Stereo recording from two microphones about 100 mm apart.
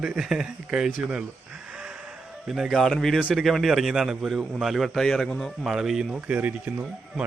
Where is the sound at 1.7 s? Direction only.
10° right (ahead or behind).